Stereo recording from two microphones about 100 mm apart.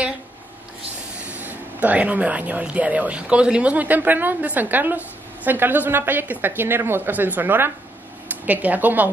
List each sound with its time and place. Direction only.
1.2 s speech: 15° right (ahead or behind)